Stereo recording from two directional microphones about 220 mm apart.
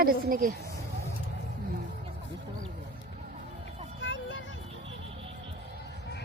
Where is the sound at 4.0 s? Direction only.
55° left (ahead or behind).